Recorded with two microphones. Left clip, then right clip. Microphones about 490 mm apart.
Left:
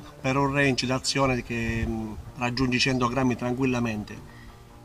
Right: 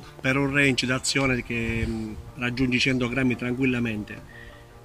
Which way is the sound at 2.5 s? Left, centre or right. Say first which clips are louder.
Right 2 dB; centre.